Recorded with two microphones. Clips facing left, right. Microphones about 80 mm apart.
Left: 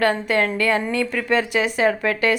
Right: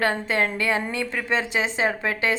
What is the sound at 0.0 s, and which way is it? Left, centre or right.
Speech, right.